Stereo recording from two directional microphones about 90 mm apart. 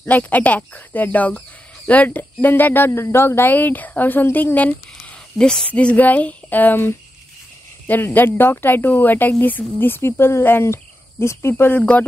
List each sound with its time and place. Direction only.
0.0 s speech: 15° left (ahead or behind)